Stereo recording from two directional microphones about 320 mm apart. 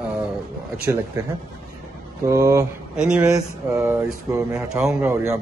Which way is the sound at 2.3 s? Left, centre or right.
Centre.